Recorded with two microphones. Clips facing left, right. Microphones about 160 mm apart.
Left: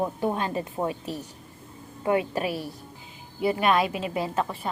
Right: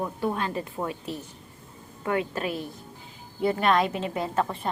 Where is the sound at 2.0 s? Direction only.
15° left (ahead or behind).